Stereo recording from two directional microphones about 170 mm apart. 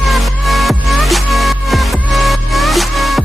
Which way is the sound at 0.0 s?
Centre (ahead or behind).